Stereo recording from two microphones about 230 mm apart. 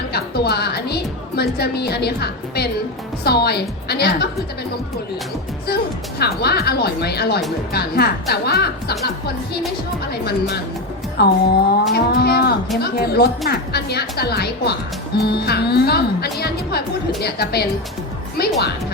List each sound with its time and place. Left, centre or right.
0.1 s a woman's voice: left
5.6 s speech: left